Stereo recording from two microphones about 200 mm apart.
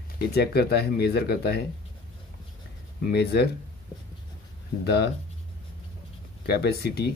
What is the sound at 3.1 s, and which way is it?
Speech, 55° left (ahead or behind).